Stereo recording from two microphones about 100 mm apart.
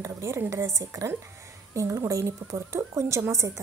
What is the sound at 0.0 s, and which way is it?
A woman's voice, 30° right (ahead or behind).